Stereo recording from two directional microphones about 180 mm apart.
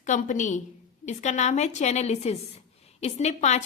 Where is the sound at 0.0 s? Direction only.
45° left (ahead or behind).